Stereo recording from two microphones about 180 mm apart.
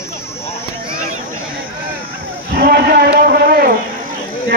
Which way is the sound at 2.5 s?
60° right (ahead or behind).